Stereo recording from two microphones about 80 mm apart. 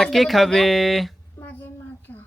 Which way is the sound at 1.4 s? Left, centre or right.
Left.